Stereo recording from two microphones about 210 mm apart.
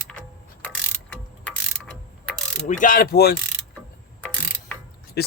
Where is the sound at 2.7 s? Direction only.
40° left (ahead or behind).